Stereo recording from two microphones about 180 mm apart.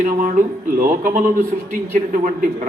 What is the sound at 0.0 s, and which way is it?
A man's voice, 45° right (ahead or behind).